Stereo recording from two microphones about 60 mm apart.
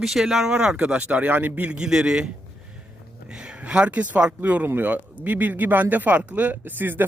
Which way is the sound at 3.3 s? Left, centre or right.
Centre.